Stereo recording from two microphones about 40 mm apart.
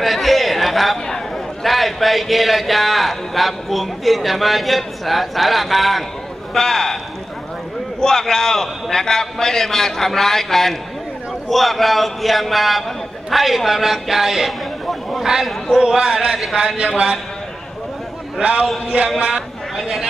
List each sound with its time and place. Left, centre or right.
0.0 s chatter: centre
1.0 s a sound: centre
1.7 s a man's voice: centre
8.0 s a man's voice: centre; by 17.2 s right
18.4 s a man's voice: right
19.8 s a man's voice: centre